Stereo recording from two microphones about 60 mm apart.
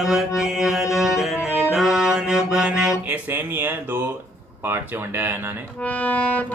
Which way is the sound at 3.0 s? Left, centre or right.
Right.